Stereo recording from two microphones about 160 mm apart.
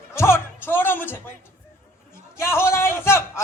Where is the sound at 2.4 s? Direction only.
15° left (ahead or behind).